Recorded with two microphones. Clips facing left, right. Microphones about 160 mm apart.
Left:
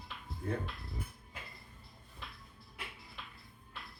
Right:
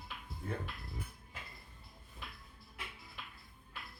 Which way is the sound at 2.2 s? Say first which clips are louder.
Left 1 dB; centre (ahead or behind).